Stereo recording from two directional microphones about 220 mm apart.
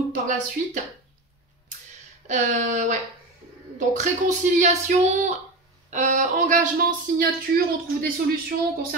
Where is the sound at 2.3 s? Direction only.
35° right (ahead or behind).